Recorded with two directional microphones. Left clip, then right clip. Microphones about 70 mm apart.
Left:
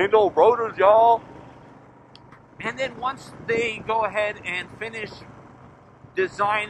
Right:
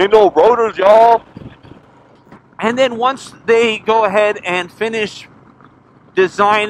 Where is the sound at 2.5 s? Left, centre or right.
Right.